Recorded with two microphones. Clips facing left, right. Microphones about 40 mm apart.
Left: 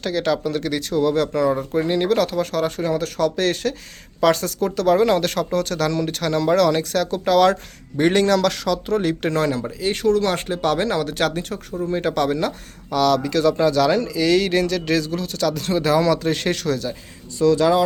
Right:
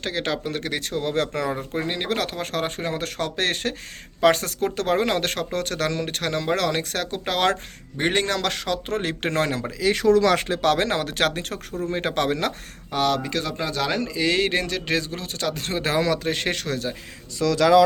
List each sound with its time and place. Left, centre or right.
0.0 s speech: right
8.9 s speech: right
9.8 s speech: right
10.4 s speech: right
12.9 s speech: right
16.0 s speech: centre
17.3 s speech: right